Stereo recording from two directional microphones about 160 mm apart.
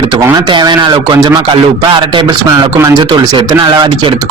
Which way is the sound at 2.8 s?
25° right (ahead or behind).